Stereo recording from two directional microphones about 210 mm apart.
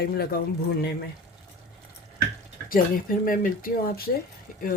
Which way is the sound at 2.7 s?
40° left (ahead or behind).